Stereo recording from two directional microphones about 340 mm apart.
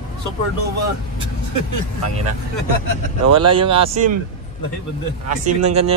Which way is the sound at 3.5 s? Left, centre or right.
Centre.